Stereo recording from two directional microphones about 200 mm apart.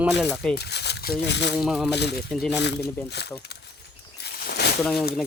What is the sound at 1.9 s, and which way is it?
Speech, 55° left (ahead or behind).